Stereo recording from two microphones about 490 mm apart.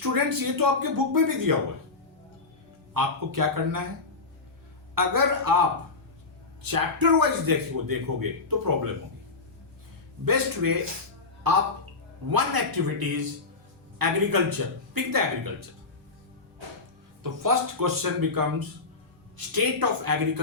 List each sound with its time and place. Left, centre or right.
0.0 s speech: right
2.9 s speech: right
4.9 s speech: right
10.2 s speech: right
17.2 s speech: right
19.5 s speech: right